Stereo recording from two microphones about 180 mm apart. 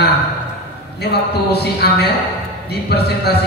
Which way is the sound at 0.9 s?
65° left (ahead or behind).